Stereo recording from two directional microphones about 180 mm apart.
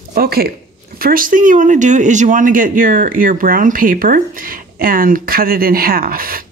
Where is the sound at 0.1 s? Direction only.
55° right (ahead or behind).